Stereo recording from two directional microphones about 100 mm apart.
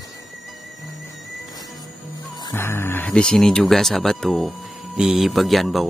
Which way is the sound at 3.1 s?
5° left (ahead or behind).